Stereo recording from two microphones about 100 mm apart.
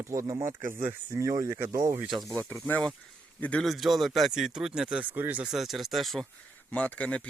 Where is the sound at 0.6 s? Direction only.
20° right (ahead or behind).